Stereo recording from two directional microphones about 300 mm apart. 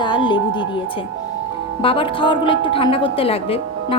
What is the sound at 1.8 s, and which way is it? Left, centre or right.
A woman's voice, centre.